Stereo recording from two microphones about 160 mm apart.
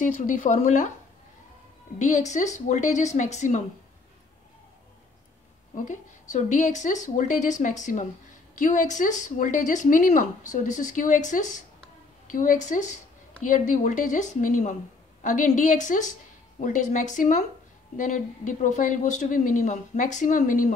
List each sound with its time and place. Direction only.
0.0 s speech: 50° left (ahead or behind)
2.0 s speech: 50° left (ahead or behind)
5.8 s speech: 50° left (ahead or behind)